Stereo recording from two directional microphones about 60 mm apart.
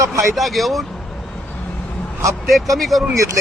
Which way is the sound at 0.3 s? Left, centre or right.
Centre.